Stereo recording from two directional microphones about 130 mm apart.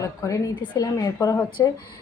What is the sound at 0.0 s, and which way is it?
A woman's voice, 25° left (ahead or behind).